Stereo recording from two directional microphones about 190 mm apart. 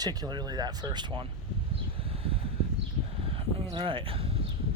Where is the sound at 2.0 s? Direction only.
30° right (ahead or behind).